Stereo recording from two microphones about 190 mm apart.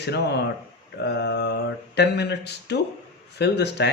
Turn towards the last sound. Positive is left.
turn(degrees=65)  # may be behind; listen again after turning